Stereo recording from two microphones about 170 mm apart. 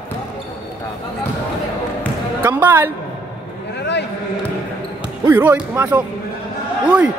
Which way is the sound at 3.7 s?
90° left.